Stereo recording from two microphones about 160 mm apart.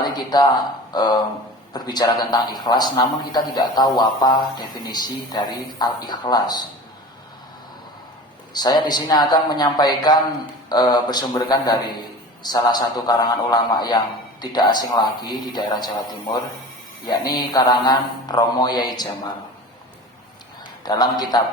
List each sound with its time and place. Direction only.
0.9 s a man's voice: 25° left (ahead or behind)
8.5 s a man's voice: 25° left (ahead or behind)
20.8 s a man's voice: 25° left (ahead or behind)